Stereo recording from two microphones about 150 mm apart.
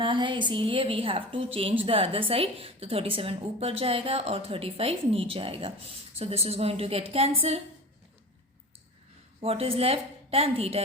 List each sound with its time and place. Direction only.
0.0 s a woman's voice: 35° right (ahead or behind)
9.4 s a woman's voice: 40° right (ahead or behind)